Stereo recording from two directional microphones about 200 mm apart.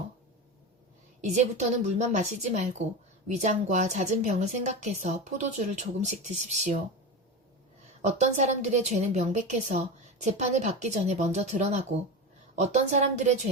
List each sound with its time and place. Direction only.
1.2 s a woman's voice: 35° right (ahead or behind)
8.0 s a woman's voice: 35° right (ahead or behind)